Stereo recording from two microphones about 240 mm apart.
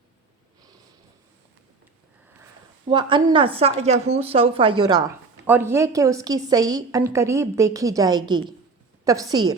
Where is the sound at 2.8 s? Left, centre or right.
Centre.